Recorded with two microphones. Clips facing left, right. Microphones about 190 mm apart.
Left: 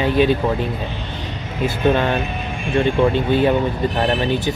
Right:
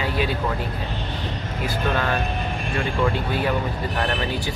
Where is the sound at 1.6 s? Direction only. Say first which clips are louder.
Left 7 dB; 25° left (ahead or behind).